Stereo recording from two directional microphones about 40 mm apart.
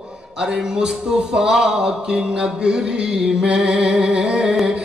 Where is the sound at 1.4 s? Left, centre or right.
Centre.